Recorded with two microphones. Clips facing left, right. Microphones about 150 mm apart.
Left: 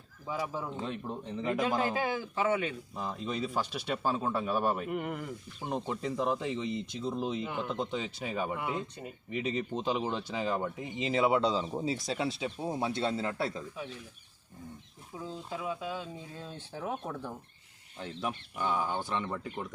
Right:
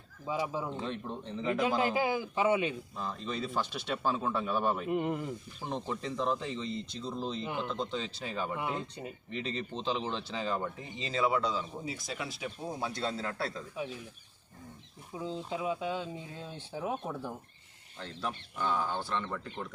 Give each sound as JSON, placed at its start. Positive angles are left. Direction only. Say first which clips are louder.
{"t": 0.3, "sound": "speech", "louder": "right 2 dB", "side_deg": -15}
{"t": 0.7, "sound": "speech", "louder": "even", "side_deg": 5}
{"t": 1.6, "sound": "speech", "louder": "right 2 dB", "side_deg": -10}
{"t": 2.9, "sound": "speech", "louder": "left 1 dB", "side_deg": 15}
{"t": 4.9, "sound": "speech", "louder": "right 3 dB", "side_deg": -20}
{"t": 5.6, "sound": "speech", "louder": "left 2 dB", "side_deg": 5}
{"t": 8.5, "sound": "speech", "louder": "even", "side_deg": -20}
{"t": 9.3, "sound": "speech", "louder": "left 5 dB", "side_deg": 10}
{"t": 15.2, "sound": "speech", "louder": "right 3 dB", "side_deg": -20}
{"t": 18.0, "sound": "speech", "louder": "left 2 dB", "side_deg": 15}